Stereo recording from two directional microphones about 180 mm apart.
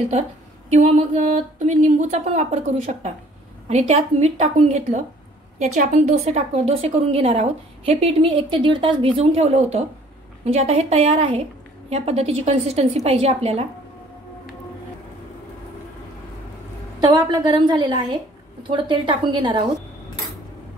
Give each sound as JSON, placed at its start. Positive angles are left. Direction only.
{"t": 0.7, "sound": "a woman's voice", "side_deg": -40}
{"t": 17.0, "sound": "a woman's voice", "side_deg": -20}